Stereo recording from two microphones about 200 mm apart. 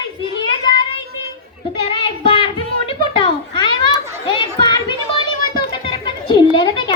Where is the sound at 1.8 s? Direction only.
25° left (ahead or behind).